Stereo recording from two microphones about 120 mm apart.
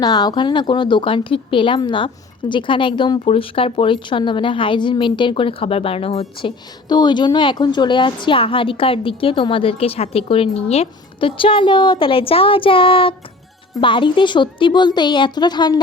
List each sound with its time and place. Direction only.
0.0 s a woman's voice: 35° left (ahead or behind); by 6.5 s 55° left (ahead or behind)
6.8 s a woman's voice: 35° left (ahead or behind)